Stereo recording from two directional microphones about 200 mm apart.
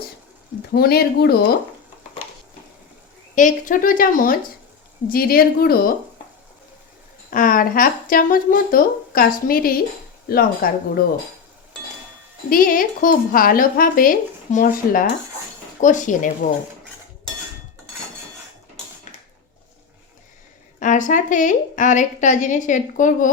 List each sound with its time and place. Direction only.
0.7 s speech: 50° left (ahead or behind)
3.3 s speech: 40° left (ahead or behind)
7.3 s speech: 45° left (ahead or behind)
12.5 s a woman's voice: 45° left (ahead or behind)
19.1 s a sound: 35° left (ahead or behind)
20.7 s a woman's voice: 40° left (ahead or behind)